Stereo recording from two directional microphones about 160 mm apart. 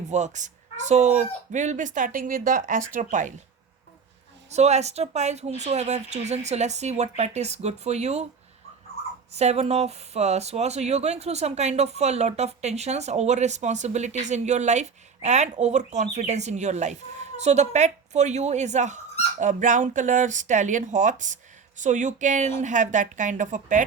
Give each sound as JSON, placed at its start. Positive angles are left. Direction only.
{"t": 0.1, "sound": "speech", "side_deg": -50}
{"t": 4.5, "sound": "speech", "side_deg": -45}
{"t": 9.3, "sound": "speech", "side_deg": -45}